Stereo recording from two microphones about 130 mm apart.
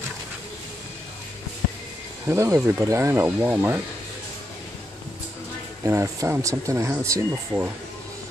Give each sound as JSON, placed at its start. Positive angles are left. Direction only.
{"t": 2.2, "sound": "speech", "side_deg": -20}
{"t": 5.9, "sound": "speech", "side_deg": -20}